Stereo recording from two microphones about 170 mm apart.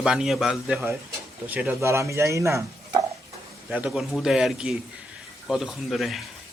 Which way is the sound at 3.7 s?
Centre (ahead or behind).